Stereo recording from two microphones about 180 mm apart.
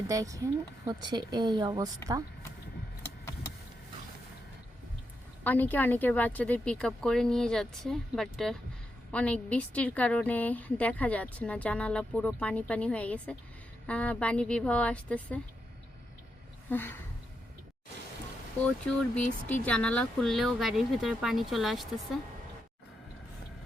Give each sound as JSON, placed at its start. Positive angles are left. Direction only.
{"t": 0.1, "sound": "a woman's voice", "side_deg": -20}
{"t": 5.4, "sound": "a woman's voice", "side_deg": 10}
{"t": 16.6, "sound": "a woman's voice", "side_deg": 10}
{"t": 18.9, "sound": "a woman's voice", "side_deg": 5}